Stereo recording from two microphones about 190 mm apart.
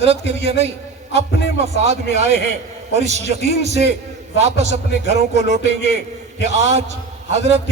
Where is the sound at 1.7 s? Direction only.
35° right (ahead or behind).